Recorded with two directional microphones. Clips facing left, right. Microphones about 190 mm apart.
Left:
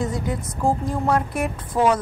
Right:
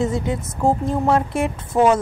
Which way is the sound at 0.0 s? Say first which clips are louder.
Right 4 dB; 25° right (ahead or behind).